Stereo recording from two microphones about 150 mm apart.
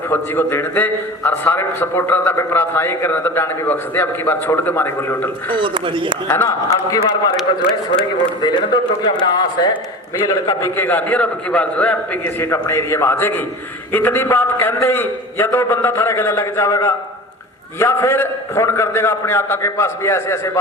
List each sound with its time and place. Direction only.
0.1 s a man's voice: 15° left (ahead or behind)
5.5 s speech: 35° right (ahead or behind)
6.2 s a man's voice: 15° left (ahead or behind)
7.3 s a man's voice: centre (ahead or behind)
8.4 s a man's voice: 30° left (ahead or behind)
10.6 s a man's voice: 15° left (ahead or behind)